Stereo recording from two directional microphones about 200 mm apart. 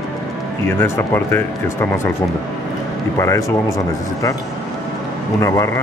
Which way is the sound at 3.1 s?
15° left (ahead or behind).